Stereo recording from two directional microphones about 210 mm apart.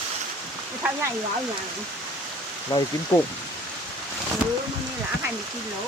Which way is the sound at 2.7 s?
20° left (ahead or behind).